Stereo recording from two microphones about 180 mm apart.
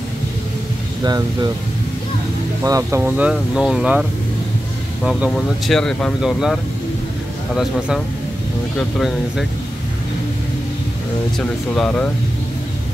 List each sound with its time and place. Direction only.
1.0 s speech: 20° right (ahead or behind)
2.6 s speech: 15° right (ahead or behind)
5.0 s speech: centre (ahead or behind)
8.7 s speech: centre (ahead or behind)
11.3 s speech: 5° left (ahead or behind)